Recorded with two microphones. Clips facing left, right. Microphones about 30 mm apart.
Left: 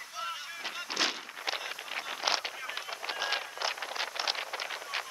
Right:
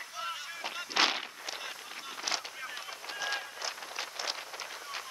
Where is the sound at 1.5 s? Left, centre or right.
Left.